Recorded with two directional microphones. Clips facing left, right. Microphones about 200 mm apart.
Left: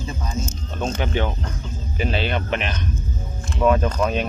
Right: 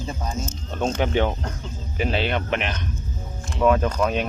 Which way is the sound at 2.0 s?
5° right (ahead or behind).